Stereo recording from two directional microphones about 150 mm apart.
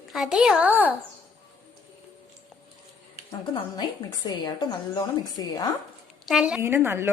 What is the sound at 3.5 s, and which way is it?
A woman's voice, 25° left (ahead or behind).